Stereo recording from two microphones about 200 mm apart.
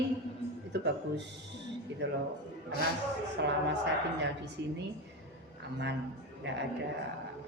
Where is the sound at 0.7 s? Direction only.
60° right (ahead or behind).